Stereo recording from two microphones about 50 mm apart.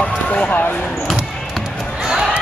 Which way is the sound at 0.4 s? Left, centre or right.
Left.